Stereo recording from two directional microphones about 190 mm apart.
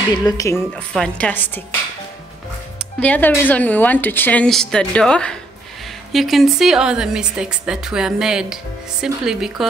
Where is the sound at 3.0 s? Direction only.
10° left (ahead or behind).